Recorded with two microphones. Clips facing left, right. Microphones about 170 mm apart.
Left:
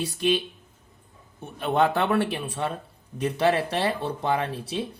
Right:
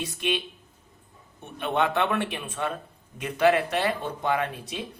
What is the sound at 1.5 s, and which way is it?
Speech, 40° left (ahead or behind).